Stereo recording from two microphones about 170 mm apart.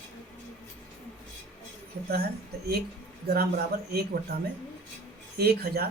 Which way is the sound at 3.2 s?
65° right (ahead or behind).